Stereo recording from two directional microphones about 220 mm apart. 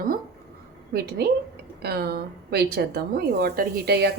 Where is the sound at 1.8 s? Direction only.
45° right (ahead or behind).